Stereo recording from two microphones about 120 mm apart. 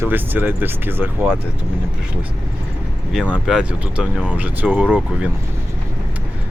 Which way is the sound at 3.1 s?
5° right (ahead or behind).